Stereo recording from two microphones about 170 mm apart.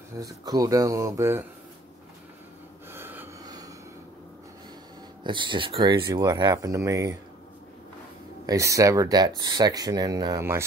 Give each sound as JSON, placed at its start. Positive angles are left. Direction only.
{"t": 0.2, "sound": "speech", "side_deg": -20}
{"t": 2.9, "sound": "snort", "side_deg": -10}
{"t": 3.4, "sound": "a sound", "side_deg": -20}
{"t": 5.2, "sound": "speech", "side_deg": -30}
{"t": 8.5, "sound": "speech", "side_deg": -20}